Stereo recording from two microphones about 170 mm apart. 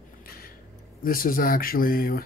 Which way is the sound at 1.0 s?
55° left (ahead or behind).